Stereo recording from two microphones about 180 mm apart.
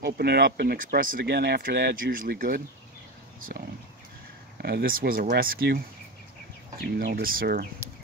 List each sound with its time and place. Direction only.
0.0 s speech: 60° right (ahead or behind)
4.6 s speech: 60° right (ahead or behind)
6.8 s speech: 60° right (ahead or behind)